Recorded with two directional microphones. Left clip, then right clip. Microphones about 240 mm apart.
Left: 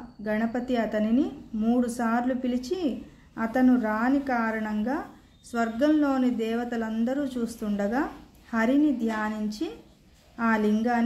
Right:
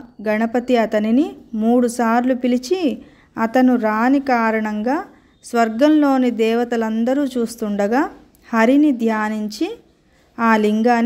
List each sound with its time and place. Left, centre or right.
0.2 s a woman's voice: right